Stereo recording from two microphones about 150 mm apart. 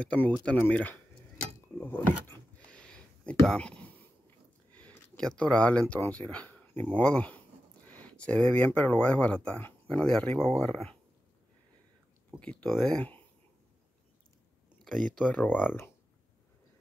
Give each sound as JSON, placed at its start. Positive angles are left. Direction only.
{"t": 0.0, "sound": "speech", "side_deg": 5}
{"t": 1.8, "sound": "a sound", "side_deg": 10}
{"t": 6.9, "sound": "speech", "side_deg": 10}
{"t": 12.4, "sound": "speech", "side_deg": 10}
{"t": 14.9, "sound": "speech", "side_deg": 5}